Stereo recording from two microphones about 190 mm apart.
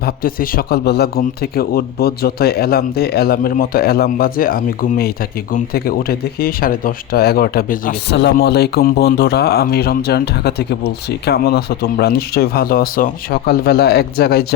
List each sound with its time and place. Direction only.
0.0 s a man's voice: 50° left (ahead or behind)
8.1 s a man's voice: 65° left (ahead or behind)